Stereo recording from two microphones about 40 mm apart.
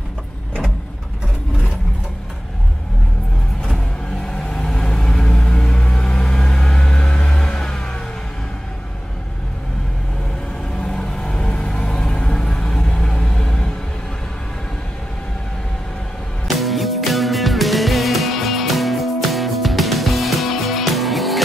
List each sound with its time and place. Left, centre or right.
4.3 s vehicle: centre
10.8 s vehicle: centre
12.5 s vehicle: left
16.4 s music: centre